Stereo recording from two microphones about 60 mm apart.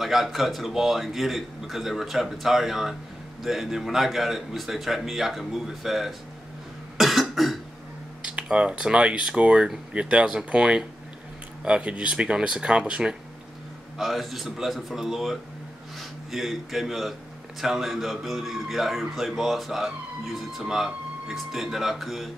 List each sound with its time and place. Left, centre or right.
0.0 s a man's voice: centre
7.0 s cough: centre
8.2 s speech: centre
13.9 s a man's voice: centre